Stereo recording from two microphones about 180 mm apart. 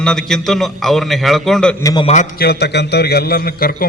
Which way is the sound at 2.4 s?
65° left (ahead or behind).